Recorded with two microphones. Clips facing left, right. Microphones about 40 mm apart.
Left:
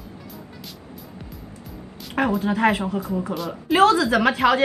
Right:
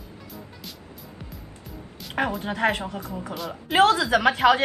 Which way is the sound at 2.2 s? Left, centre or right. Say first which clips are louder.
Left 4 dB; centre.